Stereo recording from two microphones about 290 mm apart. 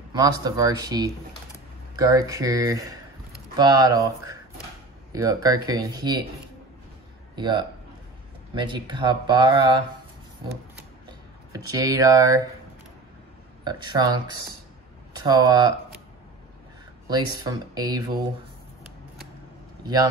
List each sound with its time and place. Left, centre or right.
0.1 s speech: centre
7.3 s speech: centre
11.1 s speech: centre
13.7 s speech: centre
17.1 s speech: centre